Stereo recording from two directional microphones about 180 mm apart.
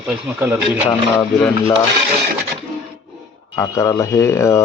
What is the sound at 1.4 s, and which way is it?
Speech, 10° left (ahead or behind).